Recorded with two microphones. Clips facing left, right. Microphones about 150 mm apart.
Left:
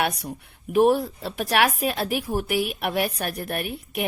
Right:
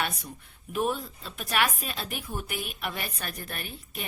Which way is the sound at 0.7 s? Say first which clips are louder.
Left 11 dB; 70° left (ahead or behind).